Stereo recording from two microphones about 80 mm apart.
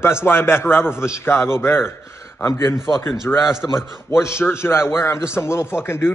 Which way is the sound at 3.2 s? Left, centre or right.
Left.